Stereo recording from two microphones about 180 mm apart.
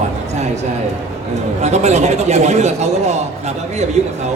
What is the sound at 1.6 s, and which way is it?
A man's voice, 40° right (ahead or behind).